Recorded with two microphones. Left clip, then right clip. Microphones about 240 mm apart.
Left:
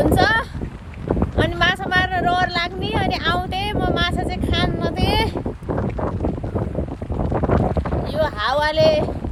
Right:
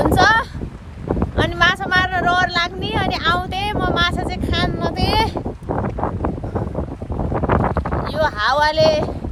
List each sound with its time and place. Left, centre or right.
0.0 s a sound: centre
1.4 s vehicle: centre
7.3 s wind noise: centre